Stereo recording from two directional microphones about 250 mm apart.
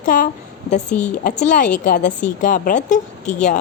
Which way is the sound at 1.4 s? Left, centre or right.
Left.